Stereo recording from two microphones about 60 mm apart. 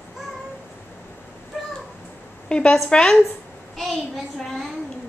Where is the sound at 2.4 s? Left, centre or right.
Centre.